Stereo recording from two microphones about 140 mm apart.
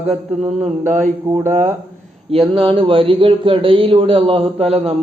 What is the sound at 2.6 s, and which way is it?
A man's voice, 40° right (ahead or behind).